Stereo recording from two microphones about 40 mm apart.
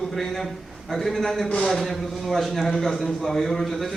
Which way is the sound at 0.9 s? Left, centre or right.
Centre.